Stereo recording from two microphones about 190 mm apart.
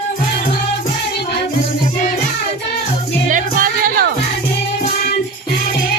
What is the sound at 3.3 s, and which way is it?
Music, 45° right (ahead or behind).